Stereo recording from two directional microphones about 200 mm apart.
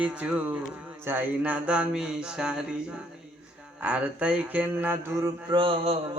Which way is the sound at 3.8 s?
5° right (ahead or behind).